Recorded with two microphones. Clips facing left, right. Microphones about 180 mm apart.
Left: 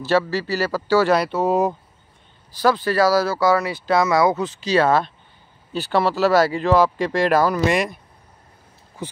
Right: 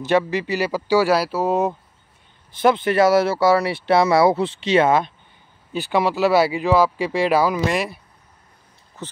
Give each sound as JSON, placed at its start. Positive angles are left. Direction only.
{"t": 0.0, "sound": "speech", "side_deg": -20}
{"t": 2.6, "sound": "speech", "side_deg": -20}
{"t": 9.0, "sound": "speech", "side_deg": 10}